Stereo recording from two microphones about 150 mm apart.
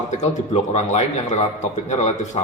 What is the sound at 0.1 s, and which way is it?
A man's voice, 50° left (ahead or behind).